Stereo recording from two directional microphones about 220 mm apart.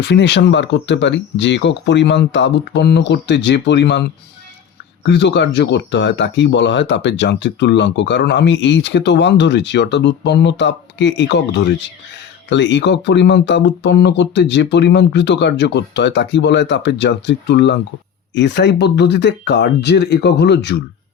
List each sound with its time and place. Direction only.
0.0 s speech: 50° left (ahead or behind)
5.0 s speech: 50° left (ahead or behind)